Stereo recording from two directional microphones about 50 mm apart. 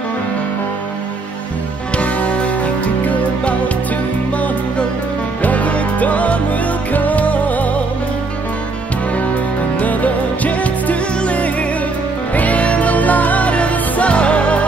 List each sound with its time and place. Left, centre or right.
2.0 s music: left
9.8 s music: left